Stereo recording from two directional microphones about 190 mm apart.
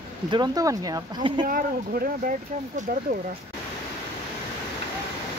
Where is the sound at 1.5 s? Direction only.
50° right (ahead or behind).